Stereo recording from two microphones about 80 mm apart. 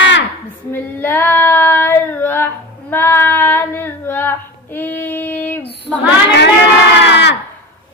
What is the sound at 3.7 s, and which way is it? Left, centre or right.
Female singing, left.